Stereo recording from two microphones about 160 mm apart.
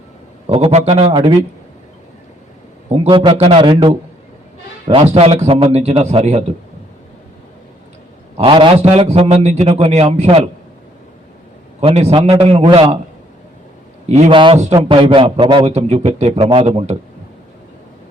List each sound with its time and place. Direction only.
0.4 s a man's voice: 40° right (ahead or behind)
2.9 s a man's voice: 35° right (ahead or behind)
5.1 s a man's voice: 40° right (ahead or behind)
8.4 s a man's voice: 30° right (ahead or behind)
11.8 s a man's voice: 40° right (ahead or behind)
14.1 s a man's voice: 35° right (ahead or behind)